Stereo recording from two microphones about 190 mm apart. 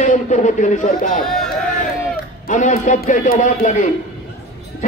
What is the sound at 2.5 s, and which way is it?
A man's voice, 40° left (ahead or behind).